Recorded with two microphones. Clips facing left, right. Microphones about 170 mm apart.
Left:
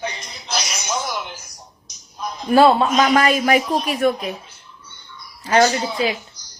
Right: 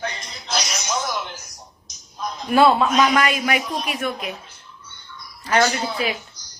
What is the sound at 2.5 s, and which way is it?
A woman's voice, 35° left (ahead or behind).